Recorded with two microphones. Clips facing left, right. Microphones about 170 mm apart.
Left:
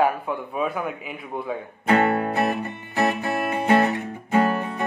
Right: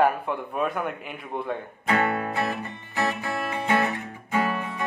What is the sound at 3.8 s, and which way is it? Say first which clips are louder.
Music: left 5 dB; 40° left (ahead or behind).